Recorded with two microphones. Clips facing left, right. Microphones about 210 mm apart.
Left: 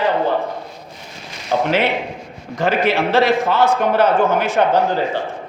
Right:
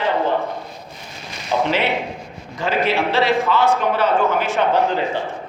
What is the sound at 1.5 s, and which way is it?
Speech, 50° left (ahead or behind).